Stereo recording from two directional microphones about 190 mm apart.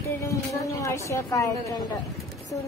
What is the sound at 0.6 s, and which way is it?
A woman's voice, 15° left (ahead or behind).